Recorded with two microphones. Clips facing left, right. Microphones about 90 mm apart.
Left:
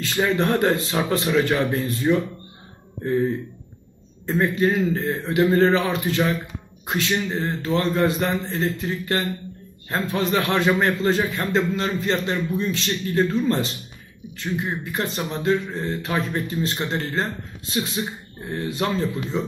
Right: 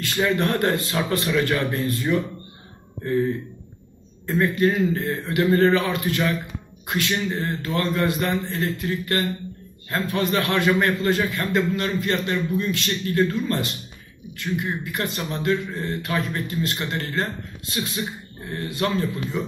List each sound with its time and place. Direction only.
0.0 s a man's voice: 20° left (ahead or behind)
4.3 s a man's voice: 20° left (ahead or behind)